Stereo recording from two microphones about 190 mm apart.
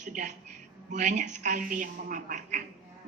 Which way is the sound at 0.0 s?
40° right (ahead or behind).